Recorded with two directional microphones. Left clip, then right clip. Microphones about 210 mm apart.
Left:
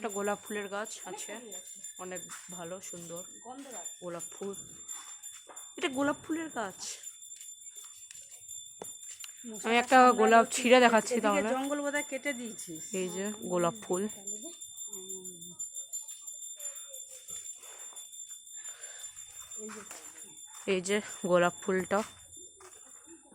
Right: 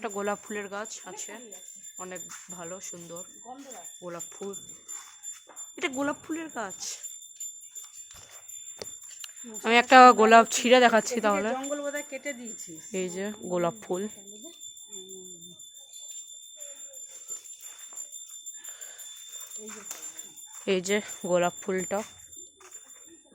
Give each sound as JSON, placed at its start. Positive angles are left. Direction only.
{"t": 0.0, "sound": "speech", "side_deg": -25}
{"t": 5.7, "sound": "speech", "side_deg": -20}
{"t": 9.6, "sound": "speech", "side_deg": -35}
{"t": 10.5, "sound": "speech", "side_deg": -15}
{"t": 11.5, "sound": "speech", "side_deg": 35}
{"t": 12.9, "sound": "speech", "side_deg": -10}
{"t": 19.6, "sound": "speech", "side_deg": -15}
{"t": 21.2, "sound": "speech", "side_deg": 0}